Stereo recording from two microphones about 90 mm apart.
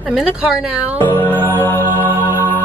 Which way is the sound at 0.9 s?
25° left (ahead or behind).